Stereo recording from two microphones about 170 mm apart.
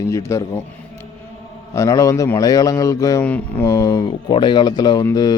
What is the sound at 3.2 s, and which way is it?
Mantra, 10° left (ahead or behind).